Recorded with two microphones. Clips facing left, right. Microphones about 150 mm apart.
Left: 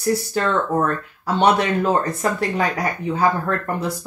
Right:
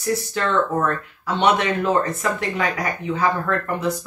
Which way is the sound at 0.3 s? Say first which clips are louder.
Left 1 dB; 35° left (ahead or behind).